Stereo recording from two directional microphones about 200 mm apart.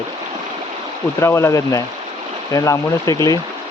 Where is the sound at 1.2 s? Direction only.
15° left (ahead or behind).